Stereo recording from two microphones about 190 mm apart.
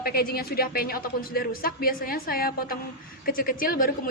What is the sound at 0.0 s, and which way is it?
Speech, 50° left (ahead or behind).